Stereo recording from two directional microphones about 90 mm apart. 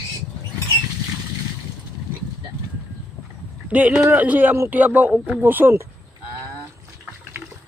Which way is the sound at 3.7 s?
15° right (ahead or behind).